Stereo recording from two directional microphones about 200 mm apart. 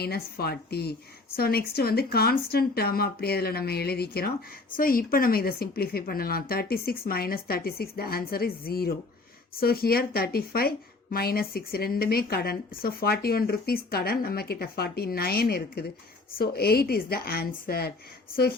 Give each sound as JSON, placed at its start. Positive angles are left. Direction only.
{"t": 0.0, "sound": "a woman's voice", "side_deg": 50}